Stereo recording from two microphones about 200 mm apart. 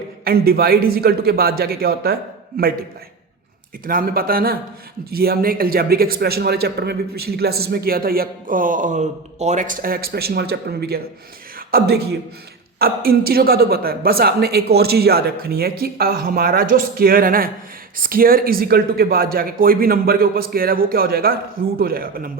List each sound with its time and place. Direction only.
0.3 s a man's voice: 50° right (ahead or behind)
3.8 s a man's voice: 45° right (ahead or behind)